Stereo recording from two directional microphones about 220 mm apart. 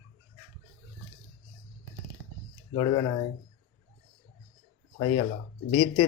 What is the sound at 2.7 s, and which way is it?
Speech, 20° left (ahead or behind).